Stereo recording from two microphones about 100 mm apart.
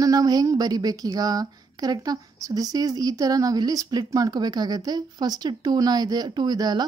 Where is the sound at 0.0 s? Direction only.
40° right (ahead or behind).